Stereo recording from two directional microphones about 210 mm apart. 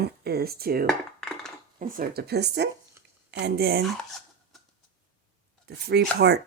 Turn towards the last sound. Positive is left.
turn(degrees=-50)  # may be behind; listen again after turning